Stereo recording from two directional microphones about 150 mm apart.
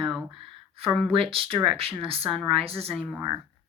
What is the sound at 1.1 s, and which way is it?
Speech, 40° right (ahead or behind).